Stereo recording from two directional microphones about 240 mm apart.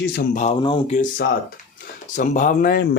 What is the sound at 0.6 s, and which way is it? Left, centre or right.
Speech, centre.